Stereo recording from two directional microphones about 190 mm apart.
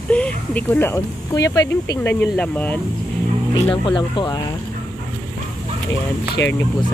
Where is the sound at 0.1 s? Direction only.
5° left (ahead or behind).